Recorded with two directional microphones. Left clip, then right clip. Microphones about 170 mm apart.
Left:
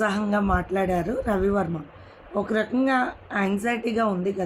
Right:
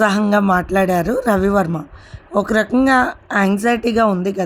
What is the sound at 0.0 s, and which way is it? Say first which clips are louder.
A woman's voice: right 9 dB; 65° right (ahead or behind).